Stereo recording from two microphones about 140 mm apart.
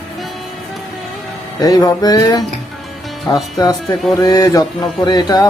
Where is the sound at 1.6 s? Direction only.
25° left (ahead or behind).